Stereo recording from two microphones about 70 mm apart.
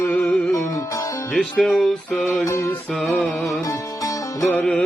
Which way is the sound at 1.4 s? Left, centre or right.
Centre.